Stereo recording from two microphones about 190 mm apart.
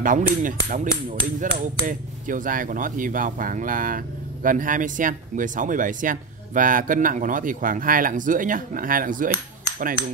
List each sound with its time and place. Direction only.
0.0 s hammer: 45° right (ahead or behind)